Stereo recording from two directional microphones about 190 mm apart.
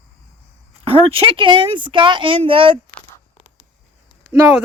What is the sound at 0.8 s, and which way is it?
Speech, 30° right (ahead or behind).